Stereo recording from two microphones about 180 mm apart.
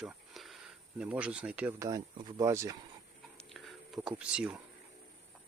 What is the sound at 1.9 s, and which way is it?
Speech, 20° right (ahead or behind).